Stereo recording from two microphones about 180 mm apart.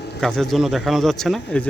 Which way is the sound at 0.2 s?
5° left (ahead or behind).